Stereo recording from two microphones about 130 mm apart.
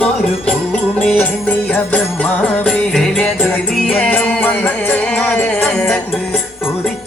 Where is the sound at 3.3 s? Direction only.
10° left (ahead or behind).